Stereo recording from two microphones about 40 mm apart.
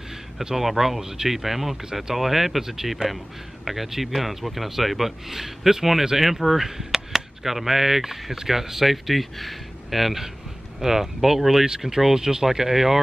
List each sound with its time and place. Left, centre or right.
0.4 s a man's voice: centre